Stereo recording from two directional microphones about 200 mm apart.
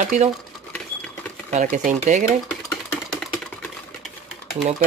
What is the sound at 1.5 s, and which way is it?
Speech, 40° right (ahead or behind).